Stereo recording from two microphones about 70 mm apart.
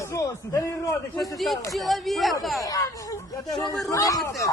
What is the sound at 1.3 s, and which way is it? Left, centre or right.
Speech, centre.